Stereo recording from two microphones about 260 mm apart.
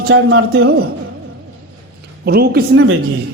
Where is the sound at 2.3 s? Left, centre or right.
Right.